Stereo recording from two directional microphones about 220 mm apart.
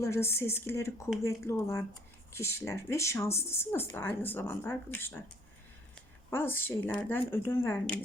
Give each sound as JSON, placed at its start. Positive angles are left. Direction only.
{"t": 0.0, "sound": "speech", "side_deg": 10}
{"t": 6.3, "sound": "speech", "side_deg": 10}